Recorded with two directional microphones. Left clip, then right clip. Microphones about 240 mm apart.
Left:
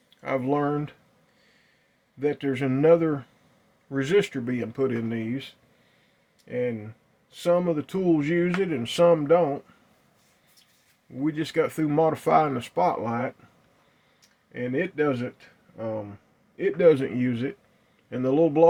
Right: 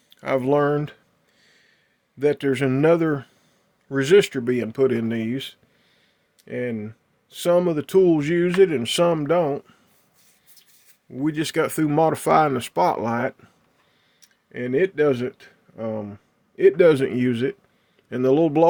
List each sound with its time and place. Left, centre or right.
0.2 s speech: right
2.1 s speech: right
11.2 s speech: right